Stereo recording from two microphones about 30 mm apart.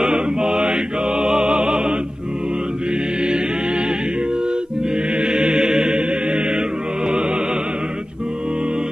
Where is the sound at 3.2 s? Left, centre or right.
Right.